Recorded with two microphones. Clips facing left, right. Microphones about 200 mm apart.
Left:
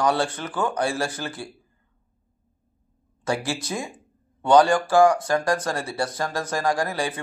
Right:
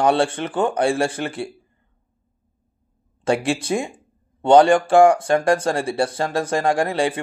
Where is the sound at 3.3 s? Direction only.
30° right (ahead or behind).